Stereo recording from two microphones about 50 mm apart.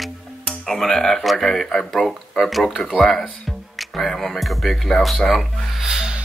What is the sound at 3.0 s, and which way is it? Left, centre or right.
Speech, centre.